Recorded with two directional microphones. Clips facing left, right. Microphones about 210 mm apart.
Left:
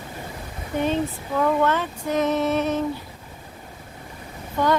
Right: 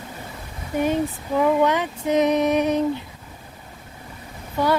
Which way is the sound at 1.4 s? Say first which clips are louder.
Right 2 dB; 15° right (ahead or behind).